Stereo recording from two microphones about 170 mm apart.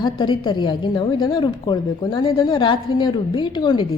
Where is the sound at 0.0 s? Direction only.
25° left (ahead or behind).